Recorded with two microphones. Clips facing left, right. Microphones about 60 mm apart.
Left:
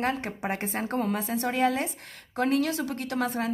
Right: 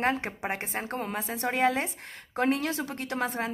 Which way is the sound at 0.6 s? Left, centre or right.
Centre.